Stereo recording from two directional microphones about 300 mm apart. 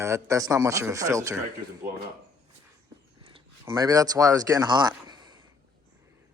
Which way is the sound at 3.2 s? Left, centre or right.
Centre.